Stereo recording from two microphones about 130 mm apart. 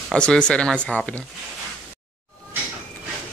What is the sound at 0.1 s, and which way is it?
Speech, 5° left (ahead or behind).